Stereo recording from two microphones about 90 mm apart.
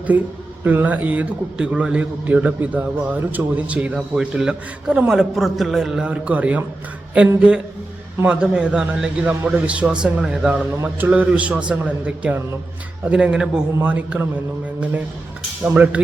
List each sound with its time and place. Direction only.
0.1 s a man's voice: 15° right (ahead or behind)
15.7 s a man's voice: 15° right (ahead or behind)